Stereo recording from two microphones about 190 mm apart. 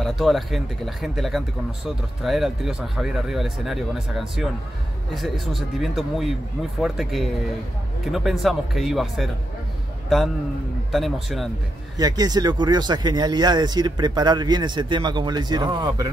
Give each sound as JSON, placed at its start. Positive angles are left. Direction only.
{"t": 0.0, "sound": "a man's voice", "side_deg": 0}
{"t": 12.0, "sound": "speech", "side_deg": -20}